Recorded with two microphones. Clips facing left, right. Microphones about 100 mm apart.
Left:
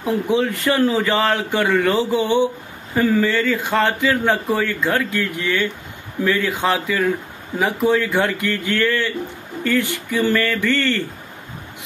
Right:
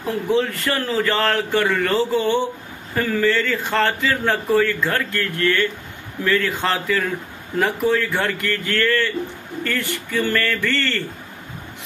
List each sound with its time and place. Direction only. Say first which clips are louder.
0.0 s speech: left 1 dB; 15° left (ahead or behind)